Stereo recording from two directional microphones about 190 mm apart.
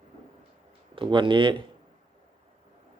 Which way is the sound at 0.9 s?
25° right (ahead or behind).